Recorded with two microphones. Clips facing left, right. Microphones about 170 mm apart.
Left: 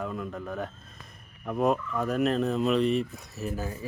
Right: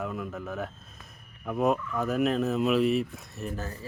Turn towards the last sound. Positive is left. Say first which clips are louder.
# left 2 dB
turn(degrees=10)  # may be behind; listen again after turning